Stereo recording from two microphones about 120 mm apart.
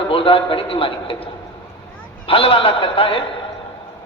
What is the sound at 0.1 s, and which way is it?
A man's voice, 50° left (ahead or behind).